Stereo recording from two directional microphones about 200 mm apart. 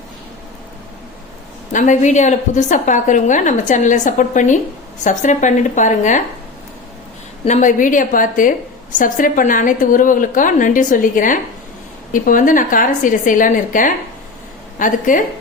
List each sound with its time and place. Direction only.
1.7 s a woman's voice: 40° left (ahead or behind)
7.4 s a woman's voice: 35° left (ahead or behind)